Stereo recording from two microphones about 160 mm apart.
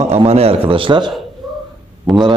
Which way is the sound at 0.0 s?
40° right (ahead or behind).